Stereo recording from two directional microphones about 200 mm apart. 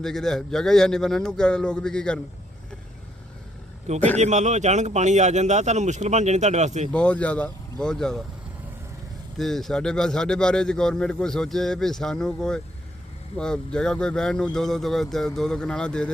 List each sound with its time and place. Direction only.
0.0 s a man's voice: centre (ahead or behind)
3.9 s a man's voice: 35° right (ahead or behind)
6.9 s a man's voice: 5° left (ahead or behind)
9.4 s a man's voice: centre (ahead or behind)